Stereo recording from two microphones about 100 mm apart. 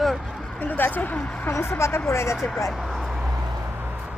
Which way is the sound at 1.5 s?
25° left (ahead or behind).